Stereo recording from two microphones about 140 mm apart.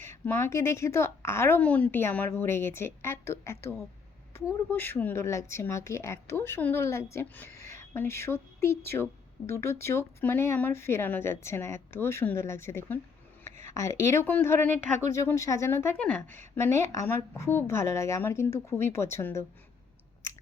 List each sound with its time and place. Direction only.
0.1 s a woman's voice: 15° left (ahead or behind)
14.7 s speech: 65° right (ahead or behind)
15.1 s a woman's voice: 20° left (ahead or behind)
16.0 s a woman's voice: 5° left (ahead or behind)
16.6 s a woman's voice: 20° left (ahead or behind)